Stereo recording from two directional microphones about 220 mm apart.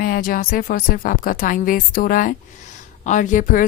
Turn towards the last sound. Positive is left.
turn(degrees=35)  # may be behind; listen again after turning